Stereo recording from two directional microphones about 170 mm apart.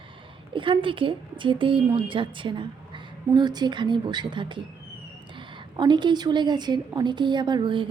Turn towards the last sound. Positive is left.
turn(degrees=-30)  # may be behind; listen again after turning